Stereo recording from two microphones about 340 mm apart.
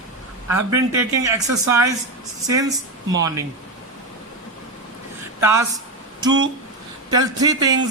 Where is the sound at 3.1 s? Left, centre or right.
Centre.